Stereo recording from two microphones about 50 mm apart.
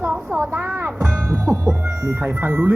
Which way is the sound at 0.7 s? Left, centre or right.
Right.